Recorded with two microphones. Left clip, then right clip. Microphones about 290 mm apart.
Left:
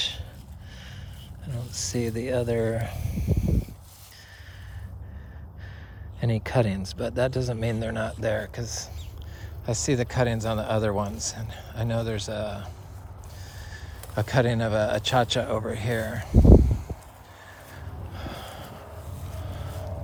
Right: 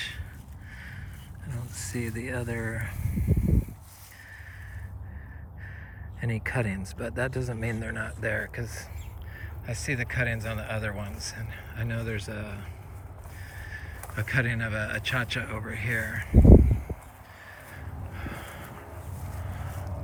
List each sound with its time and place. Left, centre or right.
1.5 s speech: centre
6.1 s speech: centre
16.3 s sheep: centre
18.1 s a sound: centre